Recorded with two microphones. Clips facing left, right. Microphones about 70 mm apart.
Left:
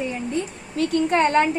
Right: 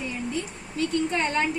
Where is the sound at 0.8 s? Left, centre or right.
Left.